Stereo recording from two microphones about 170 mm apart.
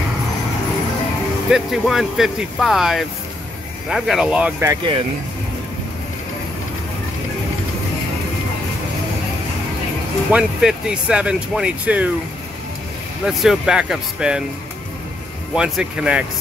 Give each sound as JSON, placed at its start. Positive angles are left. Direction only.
{"t": 1.5, "sound": "speech", "side_deg": 0}
{"t": 4.6, "sound": "speech", "side_deg": -30}
{"t": 10.3, "sound": "speech", "side_deg": -5}
{"t": 13.4, "sound": "speech", "side_deg": -5}
{"t": 15.5, "sound": "speech", "side_deg": -5}